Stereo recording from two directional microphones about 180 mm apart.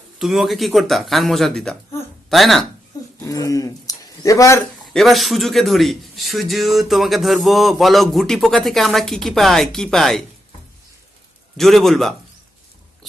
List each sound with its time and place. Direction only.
0.2 s a man's voice: centre (ahead or behind)
3.2 s speech: 20° left (ahead or behind)
4.9 s a man's voice: centre (ahead or behind)
11.5 s a man's voice: centre (ahead or behind)